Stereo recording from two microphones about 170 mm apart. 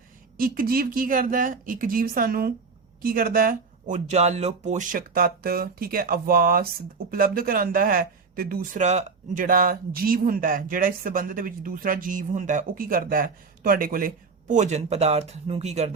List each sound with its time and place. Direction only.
0.3 s speech: 60° right (ahead or behind); by 16.0 s 40° right (ahead or behind)